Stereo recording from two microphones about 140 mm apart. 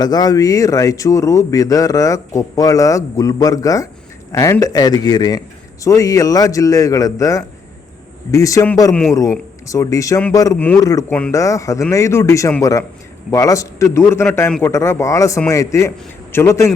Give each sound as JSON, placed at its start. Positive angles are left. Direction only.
{"t": 0.0, "sound": "a man's voice", "side_deg": 30}
{"t": 8.9, "sound": "a man's voice", "side_deg": 5}
{"t": 9.1, "sound": "a man's voice", "side_deg": 20}